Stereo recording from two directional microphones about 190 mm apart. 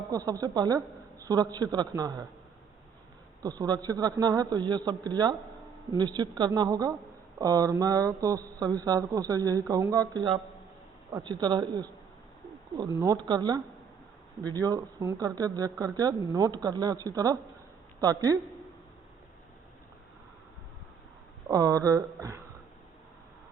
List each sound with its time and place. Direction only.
0.1 s speech: 20° right (ahead or behind)
3.4 s speech: 20° right (ahead or behind)
21.5 s speech: 20° right (ahead or behind)